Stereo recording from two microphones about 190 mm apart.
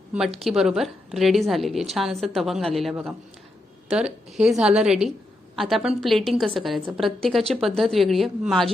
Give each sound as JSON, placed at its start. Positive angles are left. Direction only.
{"t": 0.3, "sound": "a woman's voice", "side_deg": 0}